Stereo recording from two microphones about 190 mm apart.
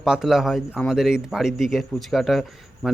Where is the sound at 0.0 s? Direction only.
Centre (ahead or behind).